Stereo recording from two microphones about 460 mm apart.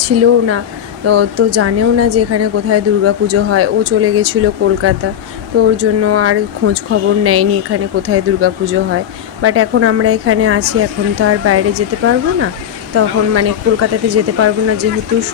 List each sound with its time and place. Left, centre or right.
0.0 s speech: right